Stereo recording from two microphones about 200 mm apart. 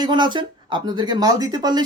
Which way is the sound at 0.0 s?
20° right (ahead or behind).